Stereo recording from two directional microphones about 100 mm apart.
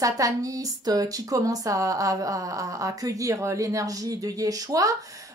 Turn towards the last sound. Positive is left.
turn(degrees=-35)  # may be behind; listen again after turning